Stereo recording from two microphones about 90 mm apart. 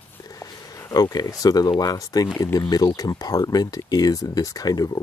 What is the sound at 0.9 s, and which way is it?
Speech, 45° left (ahead or behind).